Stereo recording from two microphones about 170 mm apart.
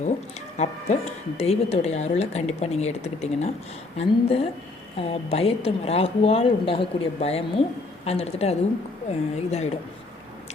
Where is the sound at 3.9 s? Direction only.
35° left (ahead or behind).